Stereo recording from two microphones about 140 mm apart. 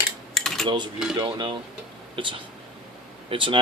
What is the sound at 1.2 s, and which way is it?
Speech, 30° right (ahead or behind).